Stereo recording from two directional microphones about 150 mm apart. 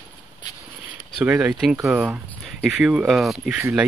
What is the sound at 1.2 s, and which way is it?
Speech, 10° right (ahead or behind).